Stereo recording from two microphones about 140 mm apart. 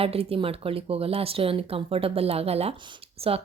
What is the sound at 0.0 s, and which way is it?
Speech, 45° right (ahead or behind).